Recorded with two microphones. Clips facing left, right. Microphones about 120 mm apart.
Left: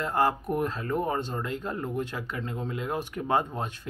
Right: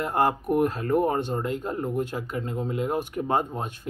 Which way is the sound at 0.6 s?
50° right (ahead or behind).